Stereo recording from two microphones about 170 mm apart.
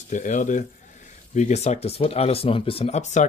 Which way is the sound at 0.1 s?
50° left (ahead or behind).